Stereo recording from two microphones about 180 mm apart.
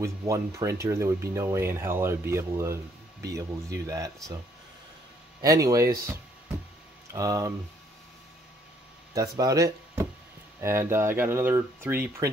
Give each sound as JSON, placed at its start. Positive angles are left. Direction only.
{"t": 0.0, "sound": "speech", "side_deg": -20}
{"t": 5.4, "sound": "speech", "side_deg": -20}
{"t": 7.1, "sound": "speech", "side_deg": -20}
{"t": 9.1, "sound": "speech", "side_deg": -20}